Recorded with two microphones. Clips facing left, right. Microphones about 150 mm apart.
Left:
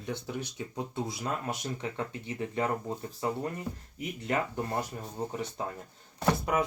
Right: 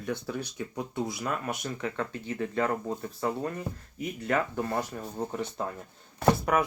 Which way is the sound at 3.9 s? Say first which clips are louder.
Right 3 dB; 20° left (ahead or behind).